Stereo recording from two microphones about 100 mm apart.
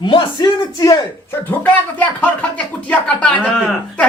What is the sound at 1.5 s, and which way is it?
Speech, 15° left (ahead or behind).